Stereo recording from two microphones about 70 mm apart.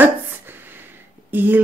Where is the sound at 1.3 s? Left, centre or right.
Right.